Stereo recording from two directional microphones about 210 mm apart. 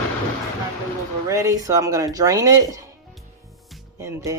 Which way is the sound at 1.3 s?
15° right (ahead or behind).